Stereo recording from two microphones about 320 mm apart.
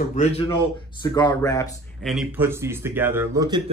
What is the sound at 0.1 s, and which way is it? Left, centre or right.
A man's voice, left.